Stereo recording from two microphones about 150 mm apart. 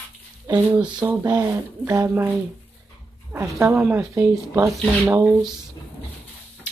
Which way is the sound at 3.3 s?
20° right (ahead or behind).